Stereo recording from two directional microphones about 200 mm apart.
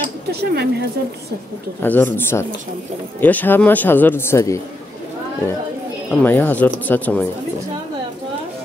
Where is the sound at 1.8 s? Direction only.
10° left (ahead or behind).